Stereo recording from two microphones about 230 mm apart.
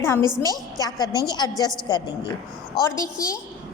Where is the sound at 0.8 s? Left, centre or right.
Centre.